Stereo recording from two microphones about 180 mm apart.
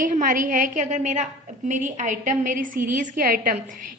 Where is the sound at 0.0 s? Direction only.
45° right (ahead or behind).